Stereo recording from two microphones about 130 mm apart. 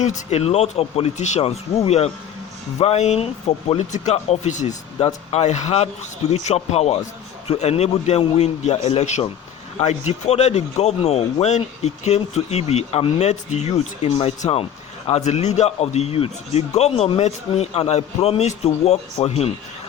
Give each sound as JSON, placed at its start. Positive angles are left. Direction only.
{"t": 0.0, "sound": "speech", "side_deg": 60}
{"t": 5.0, "sound": "speech", "side_deg": 55}